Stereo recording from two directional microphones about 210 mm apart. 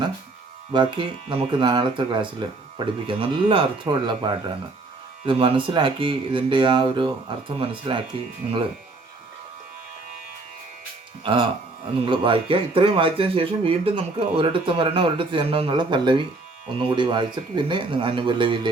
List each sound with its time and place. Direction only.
0.7 s speech: 20° right (ahead or behind)
11.2 s speech: 20° right (ahead or behind)